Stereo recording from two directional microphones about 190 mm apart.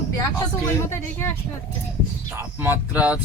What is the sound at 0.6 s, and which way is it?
Speech, 15° left (ahead or behind).